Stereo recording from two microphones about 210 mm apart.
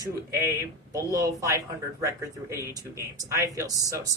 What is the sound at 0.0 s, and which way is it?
Speech, 15° right (ahead or behind).